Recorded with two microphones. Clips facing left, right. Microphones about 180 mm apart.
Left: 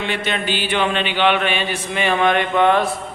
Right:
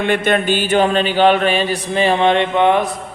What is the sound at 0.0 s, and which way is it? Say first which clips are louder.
Mantra: right 7 dB; 50° right (ahead or behind).